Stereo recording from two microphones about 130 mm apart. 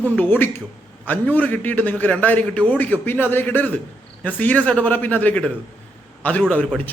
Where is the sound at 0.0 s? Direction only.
15° left (ahead or behind).